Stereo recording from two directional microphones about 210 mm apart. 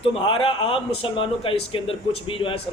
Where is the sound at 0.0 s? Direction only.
25° left (ahead or behind).